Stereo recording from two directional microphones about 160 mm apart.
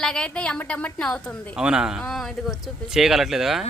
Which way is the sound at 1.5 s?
5° right (ahead or behind).